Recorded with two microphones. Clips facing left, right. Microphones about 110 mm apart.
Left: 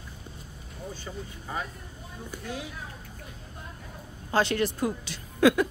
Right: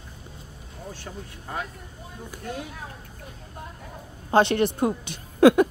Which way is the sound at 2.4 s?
50° right (ahead or behind).